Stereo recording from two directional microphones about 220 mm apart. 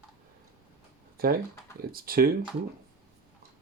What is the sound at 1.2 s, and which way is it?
Speech, 40° right (ahead or behind).